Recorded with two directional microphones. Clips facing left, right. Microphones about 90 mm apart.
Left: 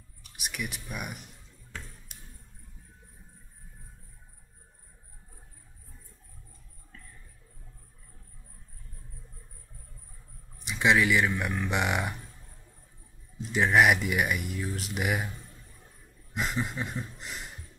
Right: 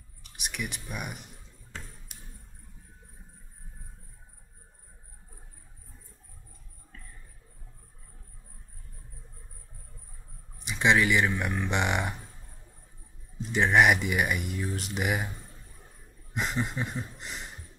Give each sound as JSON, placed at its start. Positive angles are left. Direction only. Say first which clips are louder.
{"t": 0.2, "sound": "speech", "louder": "even", "side_deg": 0}
{"t": 10.6, "sound": "speech", "louder": "even", "side_deg": 0}
{"t": 13.5, "sound": "speech", "louder": "even", "side_deg": 0}
{"t": 16.3, "sound": "speech", "louder": "right 1 dB", "side_deg": 0}